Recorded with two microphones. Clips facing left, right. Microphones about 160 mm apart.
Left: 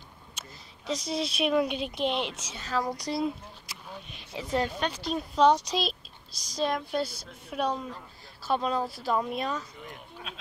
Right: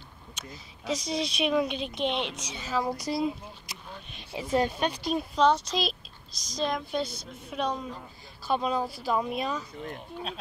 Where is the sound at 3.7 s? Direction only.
15° right (ahead or behind).